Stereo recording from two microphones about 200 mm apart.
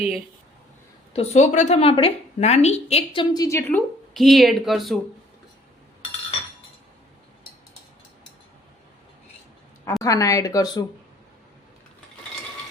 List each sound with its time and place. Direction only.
1.1 s a woman's voice: 30° left (ahead or behind); by 4.9 s centre (ahead or behind)
10.0 s speech: 15° left (ahead or behind)